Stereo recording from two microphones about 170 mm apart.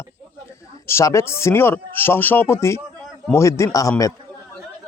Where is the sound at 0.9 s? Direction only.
15° left (ahead or behind).